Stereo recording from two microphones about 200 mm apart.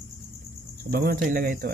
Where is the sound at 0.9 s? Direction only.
45° right (ahead or behind).